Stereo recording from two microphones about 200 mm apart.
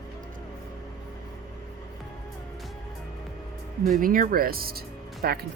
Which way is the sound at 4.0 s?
45° right (ahead or behind).